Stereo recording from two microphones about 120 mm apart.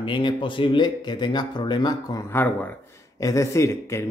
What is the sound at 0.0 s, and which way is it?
Speech, 45° left (ahead or behind).